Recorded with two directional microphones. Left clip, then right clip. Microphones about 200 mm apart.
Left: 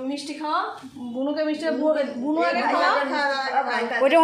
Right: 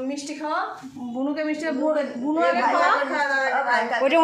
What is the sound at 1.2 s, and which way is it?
Speech, 20° right (ahead or behind).